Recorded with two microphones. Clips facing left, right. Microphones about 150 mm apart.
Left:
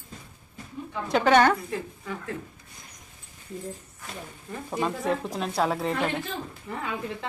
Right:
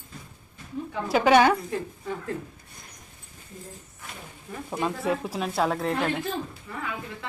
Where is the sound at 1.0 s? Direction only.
5° right (ahead or behind).